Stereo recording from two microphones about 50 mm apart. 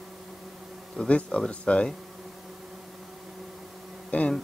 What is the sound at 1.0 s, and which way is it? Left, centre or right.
Speech, left.